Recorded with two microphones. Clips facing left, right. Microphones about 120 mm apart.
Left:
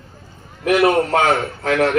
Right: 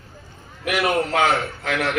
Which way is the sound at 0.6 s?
35° left (ahead or behind).